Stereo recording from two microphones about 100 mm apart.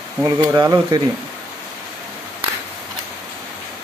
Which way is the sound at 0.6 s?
40° right (ahead or behind).